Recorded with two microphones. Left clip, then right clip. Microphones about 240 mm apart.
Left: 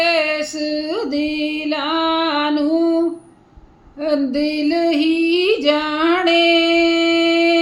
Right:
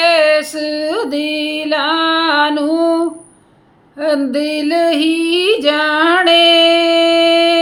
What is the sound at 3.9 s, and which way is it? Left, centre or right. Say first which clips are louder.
Female singing: right 3 dB; centre.